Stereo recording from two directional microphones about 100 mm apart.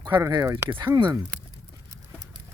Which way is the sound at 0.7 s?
50° right (ahead or behind).